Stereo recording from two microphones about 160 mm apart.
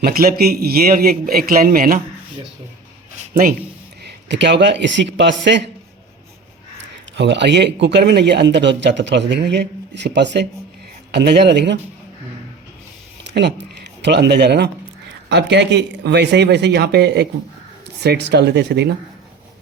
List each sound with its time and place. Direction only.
0.0 s a man's voice: 70° right (ahead or behind)
3.2 s a sound: 60° right (ahead or behind)
4.3 s a man's voice: 90° right
7.2 s a man's voice: 90° right
13.3 s a man's voice: 90° right